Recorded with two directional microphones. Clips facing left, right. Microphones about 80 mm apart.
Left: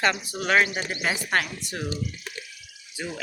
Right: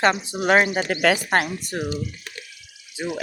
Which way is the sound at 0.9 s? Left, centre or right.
Right.